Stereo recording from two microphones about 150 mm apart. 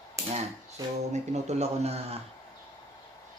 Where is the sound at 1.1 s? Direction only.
45° right (ahead or behind).